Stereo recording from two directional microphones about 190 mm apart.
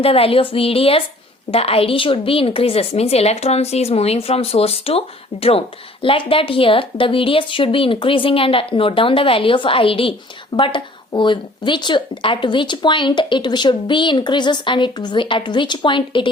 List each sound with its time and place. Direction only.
0.0 s a woman's voice: 30° left (ahead or behind)